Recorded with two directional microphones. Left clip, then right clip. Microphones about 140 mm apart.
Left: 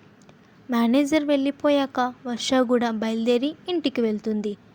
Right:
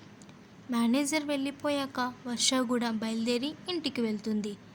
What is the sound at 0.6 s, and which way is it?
A woman's voice, 45° left (ahead or behind).